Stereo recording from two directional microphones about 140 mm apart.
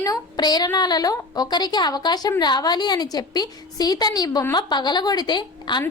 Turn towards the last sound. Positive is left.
turn(degrees=30)  # may be behind; listen again after turning